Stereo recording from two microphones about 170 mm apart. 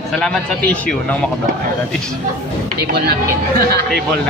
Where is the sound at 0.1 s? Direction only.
5° left (ahead or behind).